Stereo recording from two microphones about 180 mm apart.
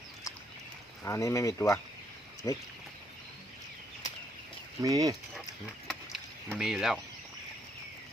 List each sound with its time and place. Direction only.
1.0 s speech: 15° left (ahead or behind)
4.8 s speech: 20° right (ahead or behind)
5.9 s a sound: centre (ahead or behind)